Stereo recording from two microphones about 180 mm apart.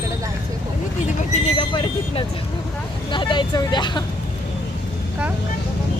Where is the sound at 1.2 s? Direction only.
30° left (ahead or behind).